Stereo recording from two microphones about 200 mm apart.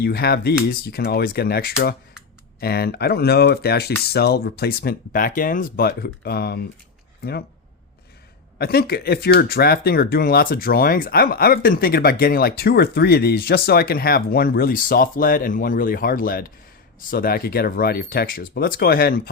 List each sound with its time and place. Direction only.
0.0 s speech: 50° left (ahead or behind)
8.5 s speech: 50° left (ahead or behind)